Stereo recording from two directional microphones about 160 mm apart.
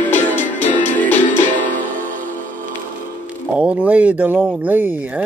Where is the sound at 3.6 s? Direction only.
10° right (ahead or behind).